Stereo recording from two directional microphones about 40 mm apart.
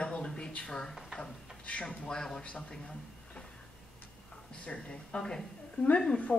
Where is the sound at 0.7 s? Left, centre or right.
Centre.